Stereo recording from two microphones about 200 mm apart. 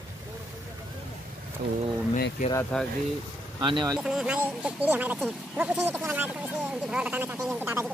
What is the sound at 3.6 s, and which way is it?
Speech, 20° right (ahead or behind).